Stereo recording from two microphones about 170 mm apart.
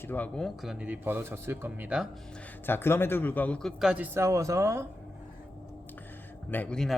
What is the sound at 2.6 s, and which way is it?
Speech, 15° left (ahead or behind).